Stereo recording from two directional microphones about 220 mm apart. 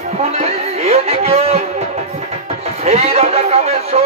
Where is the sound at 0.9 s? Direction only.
30° right (ahead or behind).